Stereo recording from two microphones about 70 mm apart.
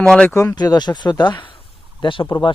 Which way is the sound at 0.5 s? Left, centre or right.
Left.